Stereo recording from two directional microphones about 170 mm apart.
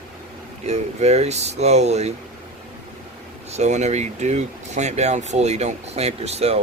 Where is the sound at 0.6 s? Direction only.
40° right (ahead or behind).